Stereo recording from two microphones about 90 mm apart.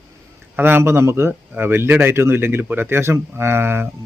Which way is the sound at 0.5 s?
25° right (ahead or behind).